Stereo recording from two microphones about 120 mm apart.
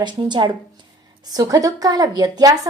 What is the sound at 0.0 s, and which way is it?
A woman's voice, 40° right (ahead or behind).